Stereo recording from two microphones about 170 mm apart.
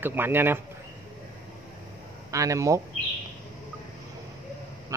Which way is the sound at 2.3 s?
20° right (ahead or behind).